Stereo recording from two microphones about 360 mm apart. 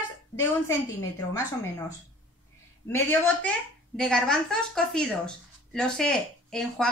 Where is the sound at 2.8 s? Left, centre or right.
Centre.